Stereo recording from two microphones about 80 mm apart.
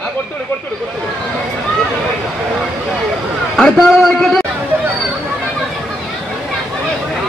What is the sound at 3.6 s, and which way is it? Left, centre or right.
Speech, centre.